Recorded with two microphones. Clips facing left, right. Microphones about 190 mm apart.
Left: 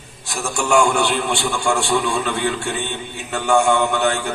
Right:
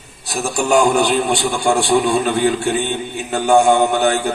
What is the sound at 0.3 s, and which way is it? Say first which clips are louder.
A man's voice: right 3 dB; 35° right (ahead or behind).